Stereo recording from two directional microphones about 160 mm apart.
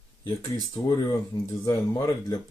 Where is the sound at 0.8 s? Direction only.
25° left (ahead or behind).